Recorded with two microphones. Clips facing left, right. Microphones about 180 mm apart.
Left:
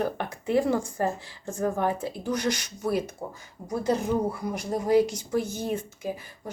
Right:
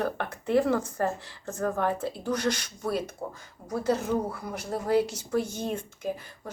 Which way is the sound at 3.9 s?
15° left (ahead or behind).